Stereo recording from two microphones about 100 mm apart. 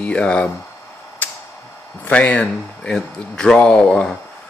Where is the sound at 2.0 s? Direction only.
15° left (ahead or behind).